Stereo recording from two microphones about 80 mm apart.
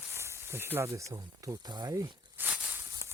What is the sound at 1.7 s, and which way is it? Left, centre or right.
Speech, right.